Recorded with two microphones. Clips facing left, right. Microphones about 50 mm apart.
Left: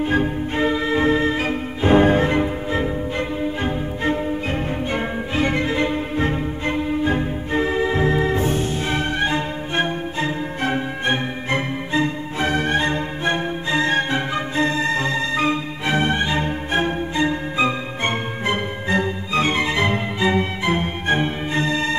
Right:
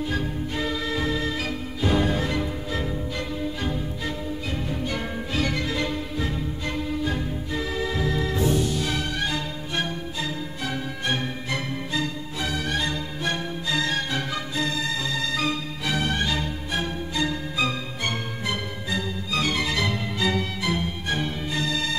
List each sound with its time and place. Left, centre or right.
0.0 s music: left